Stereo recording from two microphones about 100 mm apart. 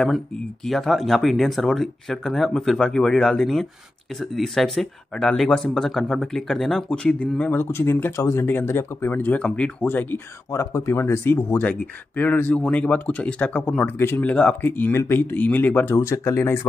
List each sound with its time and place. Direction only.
0.7 s speech: centre (ahead or behind); by 16.5 s 25° left (ahead or behind)